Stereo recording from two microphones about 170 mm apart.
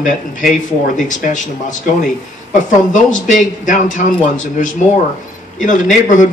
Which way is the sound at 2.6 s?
50° left (ahead or behind).